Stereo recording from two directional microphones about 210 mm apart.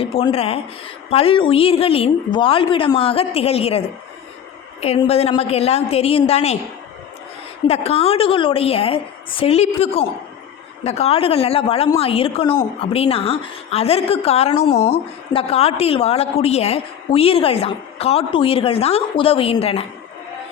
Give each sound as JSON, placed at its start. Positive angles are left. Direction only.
{"t": 0.0, "sound": "a woman's voice", "side_deg": 25}
{"t": 7.7, "sound": "a woman's voice", "side_deg": 30}